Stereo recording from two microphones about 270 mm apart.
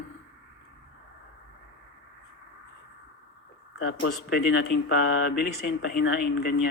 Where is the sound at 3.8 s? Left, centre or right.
Left.